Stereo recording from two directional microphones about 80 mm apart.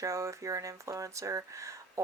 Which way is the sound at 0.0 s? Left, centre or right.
Right.